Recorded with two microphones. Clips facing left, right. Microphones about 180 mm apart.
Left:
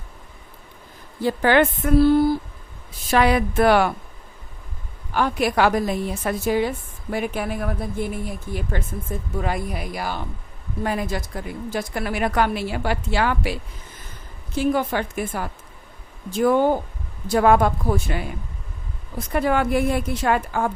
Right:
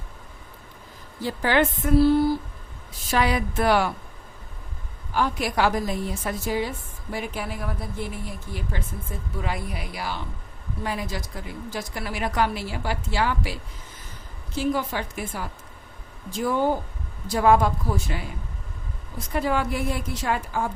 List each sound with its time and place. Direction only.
1.2 s a woman's voice: 60° left (ahead or behind)
5.1 s a woman's voice: 60° left (ahead or behind)
19.3 s a woman's voice: 60° left (ahead or behind)